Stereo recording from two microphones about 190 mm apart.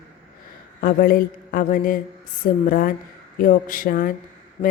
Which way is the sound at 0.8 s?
50° left (ahead or behind).